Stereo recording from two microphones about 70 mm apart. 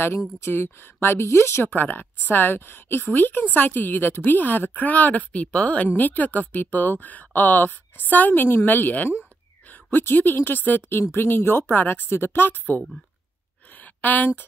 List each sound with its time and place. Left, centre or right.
0.4 s a woman's voice: left
14.0 s speech: left